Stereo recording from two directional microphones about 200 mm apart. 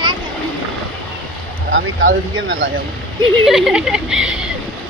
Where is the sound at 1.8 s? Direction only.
75° right (ahead or behind).